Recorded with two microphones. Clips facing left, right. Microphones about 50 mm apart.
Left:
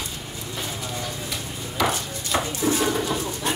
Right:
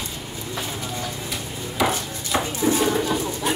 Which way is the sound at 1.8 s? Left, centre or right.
Centre.